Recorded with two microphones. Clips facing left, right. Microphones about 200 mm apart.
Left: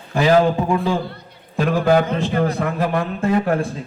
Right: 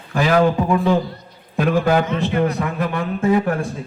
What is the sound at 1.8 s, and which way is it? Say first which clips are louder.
Speech: left 1 dB; 35° left (ahead or behind).